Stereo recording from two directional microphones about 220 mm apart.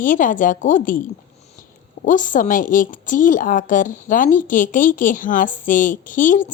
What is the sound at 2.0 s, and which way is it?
Speech, 35° left (ahead or behind).